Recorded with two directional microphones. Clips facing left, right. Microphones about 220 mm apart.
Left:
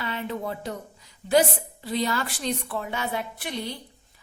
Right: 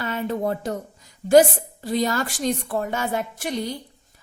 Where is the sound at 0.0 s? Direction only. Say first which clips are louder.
Right 6 dB; 45° right (ahead or behind).